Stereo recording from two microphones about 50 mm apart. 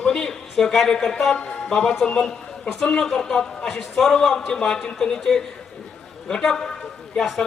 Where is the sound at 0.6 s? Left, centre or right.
Centre.